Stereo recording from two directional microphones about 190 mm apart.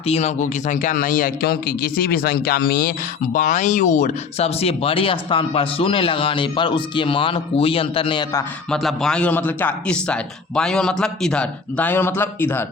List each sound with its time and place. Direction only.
0.0 s speech: 35° left (ahead or behind); by 8.4 s 20° left (ahead or behind)
8.7 s a man's voice: centre (ahead or behind)